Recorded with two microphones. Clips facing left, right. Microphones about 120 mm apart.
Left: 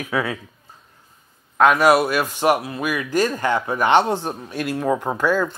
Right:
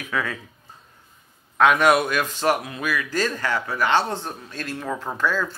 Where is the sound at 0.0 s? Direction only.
10° left (ahead or behind).